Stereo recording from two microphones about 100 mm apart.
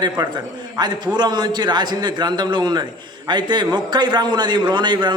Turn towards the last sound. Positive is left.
turn(degrees=-50)  # may be behind; listen again after turning